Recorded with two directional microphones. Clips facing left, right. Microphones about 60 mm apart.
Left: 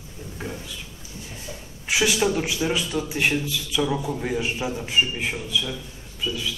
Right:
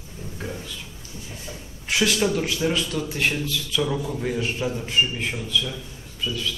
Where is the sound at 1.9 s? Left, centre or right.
Centre.